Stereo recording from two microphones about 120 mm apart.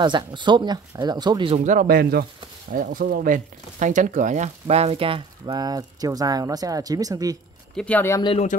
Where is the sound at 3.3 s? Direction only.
90° right; by 5.6 s 50° right (ahead or behind).